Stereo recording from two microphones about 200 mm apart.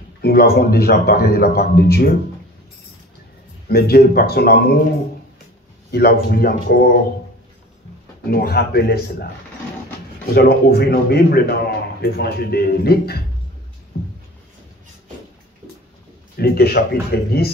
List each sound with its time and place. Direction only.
0.2 s a man's voice: 50° left (ahead or behind)
3.6 s a man's voice: 50° left (ahead or behind)
5.9 s a man's voice: 50° left (ahead or behind)
8.3 s a man's voice: 50° left (ahead or behind)
10.3 s a man's voice: 50° left (ahead or behind)
16.3 s a man's voice: 50° left (ahead or behind)